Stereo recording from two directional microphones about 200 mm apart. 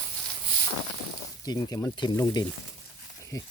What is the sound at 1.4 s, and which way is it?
Speech, 20° left (ahead or behind).